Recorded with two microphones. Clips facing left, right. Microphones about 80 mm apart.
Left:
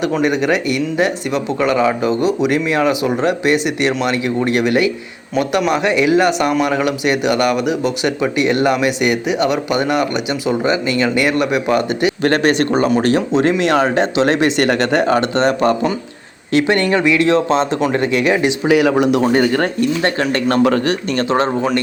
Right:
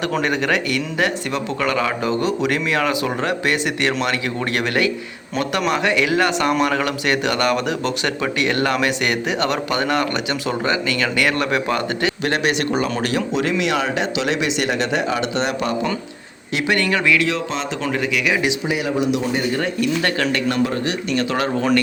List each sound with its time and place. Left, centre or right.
0.2 s speech: centre
12.2 s speech: left
18.7 s speech: left
19.8 s speech: left
20.8 s speech: left